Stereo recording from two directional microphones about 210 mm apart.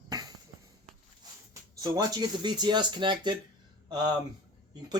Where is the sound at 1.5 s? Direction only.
20° right (ahead or behind).